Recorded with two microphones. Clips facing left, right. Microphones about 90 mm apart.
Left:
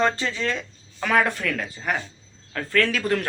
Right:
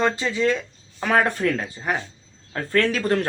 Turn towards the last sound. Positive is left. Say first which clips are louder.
# right 2 dB
turn(degrees=-30)  # may be behind; listen again after turning